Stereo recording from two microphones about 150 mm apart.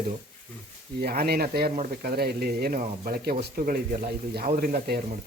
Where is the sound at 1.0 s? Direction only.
90° right.